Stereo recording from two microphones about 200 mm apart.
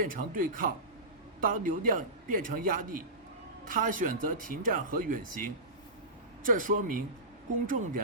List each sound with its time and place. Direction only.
0.0 s speech: 45° right (ahead or behind)
6.4 s speech: 40° right (ahead or behind)